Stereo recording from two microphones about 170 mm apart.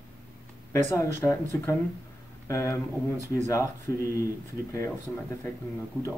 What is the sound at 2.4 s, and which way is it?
Speech, 15° left (ahead or behind).